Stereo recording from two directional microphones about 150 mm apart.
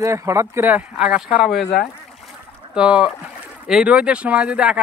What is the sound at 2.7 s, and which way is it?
Speech, 5° right (ahead or behind).